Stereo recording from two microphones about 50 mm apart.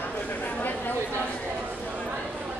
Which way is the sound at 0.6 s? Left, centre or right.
Left.